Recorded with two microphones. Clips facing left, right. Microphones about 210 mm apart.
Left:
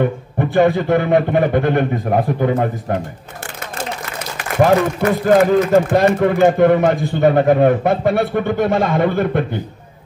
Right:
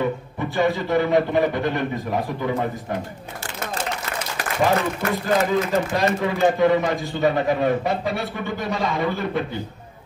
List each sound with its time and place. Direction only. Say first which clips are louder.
0.0 s a man's voice: left 6 dB; 55° left (ahead or behind)
5.2 s a man's voice: left 9 dB; 55° left (ahead or behind)